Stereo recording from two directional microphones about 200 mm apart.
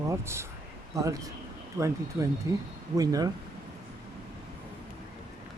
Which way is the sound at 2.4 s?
15° right (ahead or behind).